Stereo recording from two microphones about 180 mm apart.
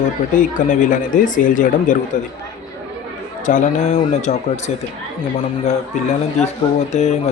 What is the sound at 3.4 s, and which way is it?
Speech, 45° left (ahead or behind).